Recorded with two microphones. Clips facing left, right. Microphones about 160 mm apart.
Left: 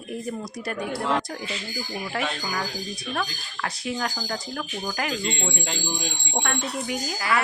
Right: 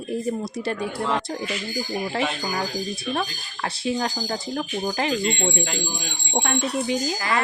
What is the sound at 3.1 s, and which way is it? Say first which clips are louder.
A woman's voice: right 1 dB; 30° right (ahead or behind).